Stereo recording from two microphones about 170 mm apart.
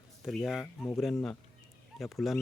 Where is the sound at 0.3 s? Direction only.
Centre (ahead or behind).